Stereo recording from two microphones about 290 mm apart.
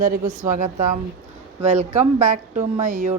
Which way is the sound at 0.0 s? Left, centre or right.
Right.